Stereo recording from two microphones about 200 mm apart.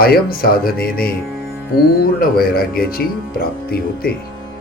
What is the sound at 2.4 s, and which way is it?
Speech, 50° left (ahead or behind).